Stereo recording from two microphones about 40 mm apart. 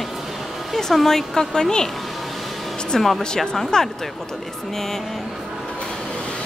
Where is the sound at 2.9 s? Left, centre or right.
Centre.